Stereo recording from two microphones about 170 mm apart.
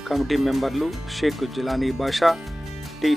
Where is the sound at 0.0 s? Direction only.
Centre (ahead or behind).